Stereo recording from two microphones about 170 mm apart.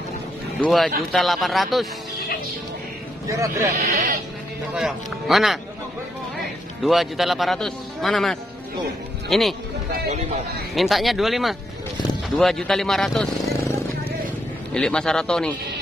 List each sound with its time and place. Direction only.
0.6 s speech: centre (ahead or behind)
3.3 s a man's voice: 20° right (ahead or behind)
3.7 s speech: 50° right (ahead or behind)
4.7 s speech: centre (ahead or behind)
6.8 s speech: centre (ahead or behind)
10.7 s speech: centre (ahead or behind)
14.7 s speech: 5° left (ahead or behind)